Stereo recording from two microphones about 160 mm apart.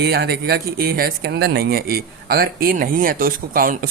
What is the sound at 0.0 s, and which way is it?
Speech, 85° right.